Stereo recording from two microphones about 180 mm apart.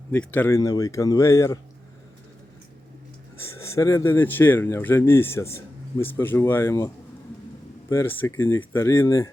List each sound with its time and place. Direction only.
0.1 s speech: 10° left (ahead or behind)
3.3 s speech: 15° left (ahead or behind)